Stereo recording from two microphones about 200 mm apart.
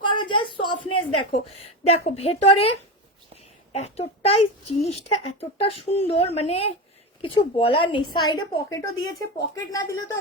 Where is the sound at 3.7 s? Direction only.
30° left (ahead or behind).